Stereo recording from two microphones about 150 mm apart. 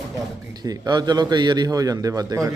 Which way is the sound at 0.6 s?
25° right (ahead or behind).